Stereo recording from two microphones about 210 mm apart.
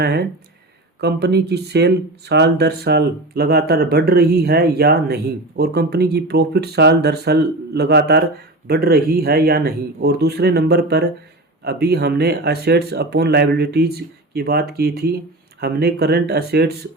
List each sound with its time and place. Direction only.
0.0 s speech: 50° right (ahead or behind)